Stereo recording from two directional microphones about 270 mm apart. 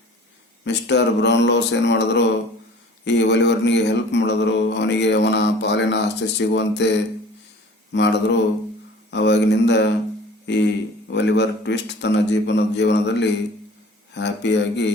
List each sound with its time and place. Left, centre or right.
0.6 s mantra: left
7.9 s mantra: left